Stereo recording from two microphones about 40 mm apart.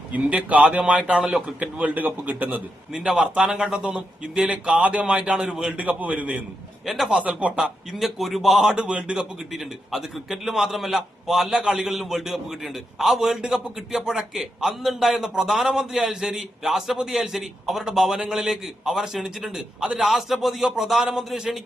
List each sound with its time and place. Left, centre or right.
0.3 s a man's voice: right
1.2 s a man's voice: centre
1.5 s a man's voice: right
2.0 s a man's voice: right
3.2 s speech: right
4.8 s speech: right
5.7 s a man's voice: right
6.8 s a man's voice: centre
7.2 s a man's voice: right
7.6 s a man's voice: centre
8.7 s speech: right
9.1 s a man's voice: centre